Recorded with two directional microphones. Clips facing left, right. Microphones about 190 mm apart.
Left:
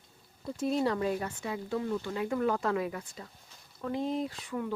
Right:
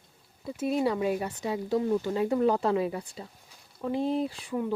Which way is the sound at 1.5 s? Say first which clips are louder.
Right 7 dB; 30° right (ahead or behind).